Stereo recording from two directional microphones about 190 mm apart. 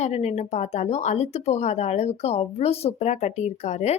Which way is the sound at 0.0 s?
35° left (ahead or behind).